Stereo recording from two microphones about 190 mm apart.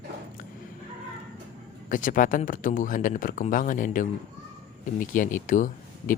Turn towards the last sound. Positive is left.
turn(degrees=45)  # may be behind; listen again after turning